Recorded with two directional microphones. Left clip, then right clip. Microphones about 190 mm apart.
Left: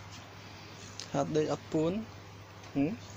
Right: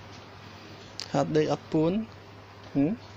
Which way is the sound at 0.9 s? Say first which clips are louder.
Right 5 dB; 30° right (ahead or behind).